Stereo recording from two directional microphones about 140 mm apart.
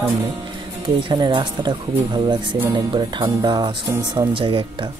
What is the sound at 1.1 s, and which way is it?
A man's voice, 35° right (ahead or behind).